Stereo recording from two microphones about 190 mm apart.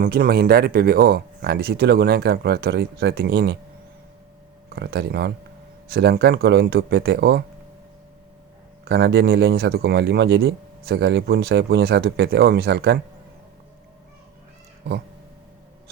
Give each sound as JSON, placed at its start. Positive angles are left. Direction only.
{"t": 0.0, "sound": "speech", "side_deg": -55}
{"t": 4.7, "sound": "speech", "side_deg": -60}
{"t": 8.8, "sound": "speech", "side_deg": -60}